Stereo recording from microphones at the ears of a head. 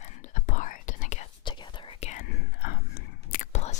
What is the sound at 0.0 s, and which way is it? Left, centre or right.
Whispering, left.